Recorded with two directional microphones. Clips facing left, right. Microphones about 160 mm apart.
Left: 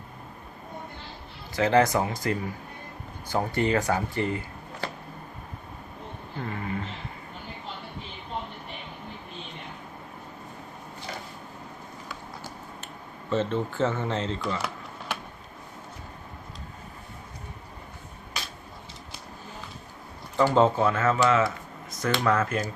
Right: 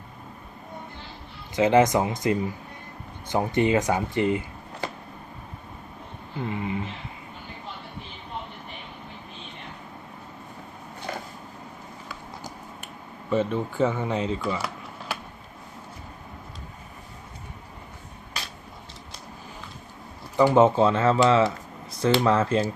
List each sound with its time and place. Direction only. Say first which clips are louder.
1.5 s speech: right 3 dB; 20° right (ahead or behind)
6.4 s a sound: right 3 dB; 20° right (ahead or behind)
13.3 s speech: right 2 dB; 10° right (ahead or behind)
20.3 s speech: right 3 dB; 15° right (ahead or behind)